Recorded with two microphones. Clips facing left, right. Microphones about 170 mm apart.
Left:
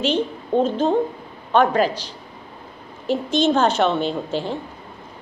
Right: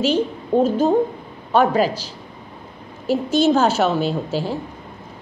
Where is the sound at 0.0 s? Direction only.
10° right (ahead or behind).